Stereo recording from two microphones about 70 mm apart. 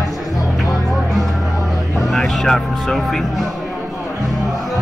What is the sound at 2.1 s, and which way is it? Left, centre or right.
Speech, centre.